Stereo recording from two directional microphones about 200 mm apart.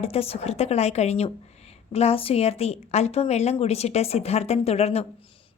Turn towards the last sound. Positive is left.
turn(degrees=30)  # may be behind; listen again after turning